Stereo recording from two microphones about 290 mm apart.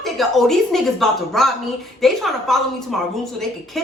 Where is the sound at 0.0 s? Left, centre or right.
Centre.